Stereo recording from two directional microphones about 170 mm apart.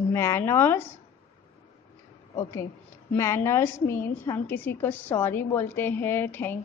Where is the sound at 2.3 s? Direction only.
15° left (ahead or behind).